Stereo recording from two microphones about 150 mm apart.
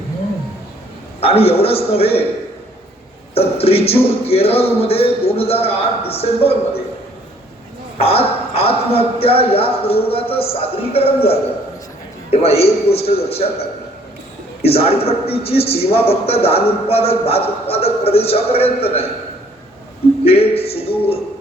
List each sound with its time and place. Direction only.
1.2 s a man's voice: 40° left (ahead or behind)
3.3 s a man's voice: 40° left (ahead or behind)
7.9 s a man's voice: 40° left (ahead or behind)
14.6 s a man's voice: 40° left (ahead or behind)
20.2 s a man's voice: 40° left (ahead or behind)